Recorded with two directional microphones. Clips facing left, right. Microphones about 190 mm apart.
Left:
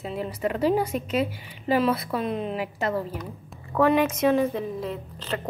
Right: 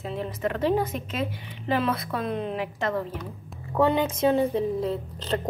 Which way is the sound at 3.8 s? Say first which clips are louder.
Left 2 dB; 30° right (ahead or behind).